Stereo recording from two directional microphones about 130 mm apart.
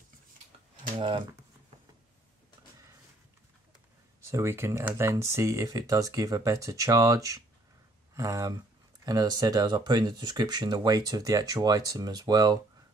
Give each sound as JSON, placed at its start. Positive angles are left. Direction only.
{"t": 0.9, "sound": "speech", "side_deg": -40}
{"t": 4.2, "sound": "speech", "side_deg": -20}